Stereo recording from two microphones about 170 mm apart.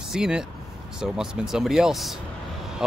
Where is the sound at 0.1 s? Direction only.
5° right (ahead or behind).